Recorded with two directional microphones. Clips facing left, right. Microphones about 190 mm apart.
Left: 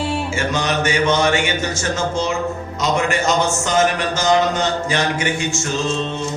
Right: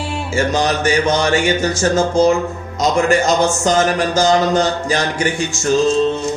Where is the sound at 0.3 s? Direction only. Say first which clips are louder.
Right 7 dB; 35° right (ahead or behind).